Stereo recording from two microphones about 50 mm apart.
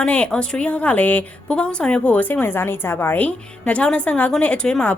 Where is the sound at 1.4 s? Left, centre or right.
Centre; by 3.1 s left.